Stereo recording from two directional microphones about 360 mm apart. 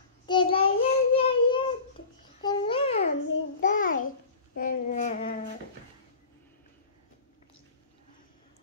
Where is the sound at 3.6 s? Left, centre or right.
Left.